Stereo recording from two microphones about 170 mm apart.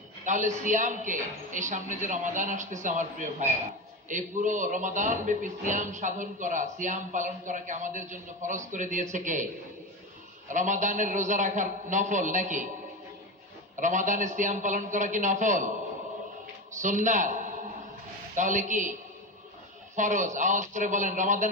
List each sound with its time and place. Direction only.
0.3 s a woman's voice: 45° right (ahead or behind)
10.5 s a woman's voice: 45° right (ahead or behind)
13.7 s a woman's voice: 45° right (ahead or behind)
16.8 s a woman's voice: 45° right (ahead or behind)
20.0 s a woman's voice: 45° right (ahead or behind)